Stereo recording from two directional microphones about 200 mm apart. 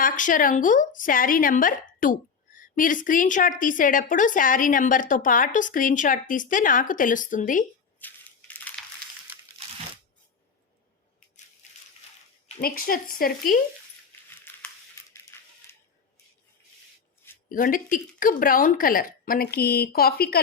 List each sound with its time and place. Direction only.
0.0 s a woman's voice: 40° left (ahead or behind)
7.9 s crushing: 10° left (ahead or behind)
12.5 s speech: 45° left (ahead or behind)
14.5 s a sound: 10° left (ahead or behind)
17.5 s speech: 45° left (ahead or behind)